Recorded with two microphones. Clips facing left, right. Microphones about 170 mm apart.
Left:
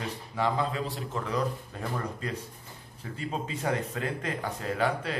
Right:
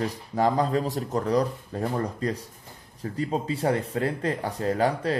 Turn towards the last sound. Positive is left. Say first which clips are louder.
# right 5 dB
turn(degrees=-40)  # may be behind; listen again after turning